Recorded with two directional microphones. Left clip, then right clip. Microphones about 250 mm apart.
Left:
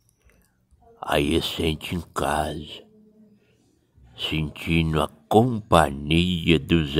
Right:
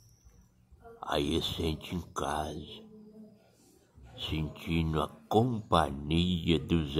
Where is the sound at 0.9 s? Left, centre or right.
Left.